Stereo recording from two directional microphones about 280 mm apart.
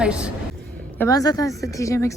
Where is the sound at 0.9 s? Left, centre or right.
Centre.